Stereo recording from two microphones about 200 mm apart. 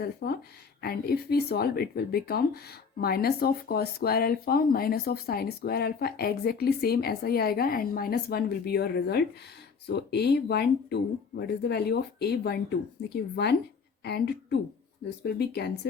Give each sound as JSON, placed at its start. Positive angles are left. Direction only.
{"t": 0.0, "sound": "a woman's voice", "side_deg": 55}